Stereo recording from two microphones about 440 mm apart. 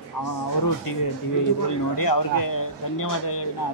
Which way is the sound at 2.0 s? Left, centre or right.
Left.